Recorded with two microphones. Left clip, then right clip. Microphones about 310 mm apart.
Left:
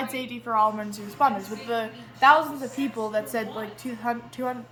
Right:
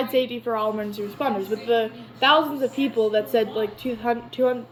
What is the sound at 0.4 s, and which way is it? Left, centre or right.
A woman's voice, left.